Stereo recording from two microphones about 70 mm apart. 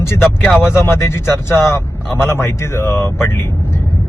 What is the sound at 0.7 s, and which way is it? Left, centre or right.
Speech, left.